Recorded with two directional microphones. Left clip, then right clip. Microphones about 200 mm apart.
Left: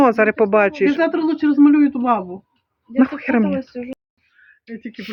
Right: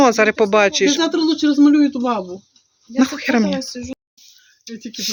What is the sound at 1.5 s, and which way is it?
Speech, 15° left (ahead or behind).